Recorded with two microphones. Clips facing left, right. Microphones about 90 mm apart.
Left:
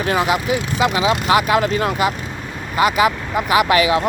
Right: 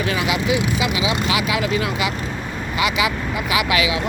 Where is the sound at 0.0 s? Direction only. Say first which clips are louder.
Left 3 dB; 40° left (ahead or behind).